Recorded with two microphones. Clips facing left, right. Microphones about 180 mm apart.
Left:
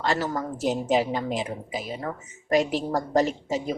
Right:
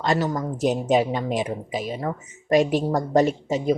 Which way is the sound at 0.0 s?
20° right (ahead or behind).